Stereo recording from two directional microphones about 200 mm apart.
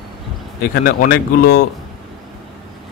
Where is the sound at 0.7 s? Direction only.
50° left (ahead or behind).